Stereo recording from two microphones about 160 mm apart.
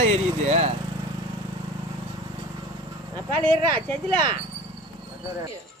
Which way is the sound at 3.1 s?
30° right (ahead or behind).